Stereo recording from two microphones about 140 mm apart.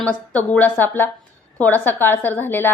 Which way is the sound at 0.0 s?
10° left (ahead or behind).